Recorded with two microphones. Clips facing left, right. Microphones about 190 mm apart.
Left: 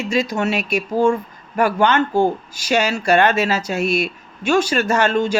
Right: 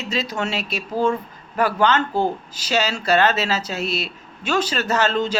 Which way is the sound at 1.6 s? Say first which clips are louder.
Left 3 dB; 45° left (ahead or behind).